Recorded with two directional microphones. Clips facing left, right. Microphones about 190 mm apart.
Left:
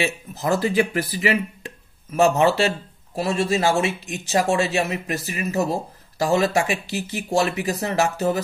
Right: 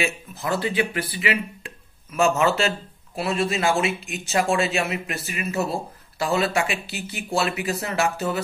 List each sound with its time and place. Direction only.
0.0 s speech: 40° left (ahead or behind)